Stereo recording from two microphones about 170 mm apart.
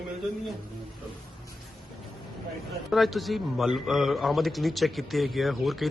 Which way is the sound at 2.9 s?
Centre (ahead or behind).